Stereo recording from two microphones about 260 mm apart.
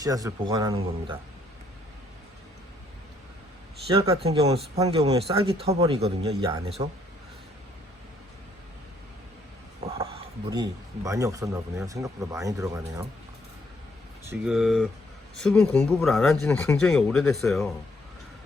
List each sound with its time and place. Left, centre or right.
0.0 s speech: centre
3.9 s a man's voice: right
10.5 s speech: centre
14.3 s speech: centre